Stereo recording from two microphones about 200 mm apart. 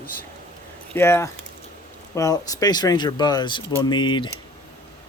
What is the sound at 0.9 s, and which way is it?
Speech, 10° left (ahead or behind).